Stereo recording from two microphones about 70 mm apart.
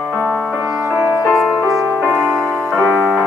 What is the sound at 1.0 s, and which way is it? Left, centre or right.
Music, left.